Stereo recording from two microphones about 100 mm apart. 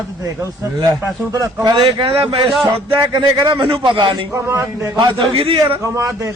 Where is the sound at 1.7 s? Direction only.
60° right (ahead or behind).